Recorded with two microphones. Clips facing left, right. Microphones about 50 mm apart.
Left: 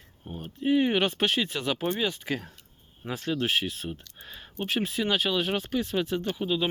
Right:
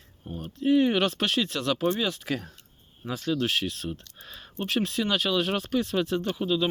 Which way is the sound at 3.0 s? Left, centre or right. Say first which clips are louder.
Right 2 dB; left.